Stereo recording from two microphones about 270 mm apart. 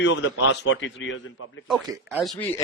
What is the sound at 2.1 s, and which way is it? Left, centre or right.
Speech, centre.